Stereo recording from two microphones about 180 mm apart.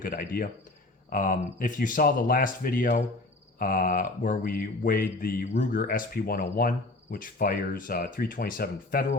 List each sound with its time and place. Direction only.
0.0 s speech: 55° left (ahead or behind)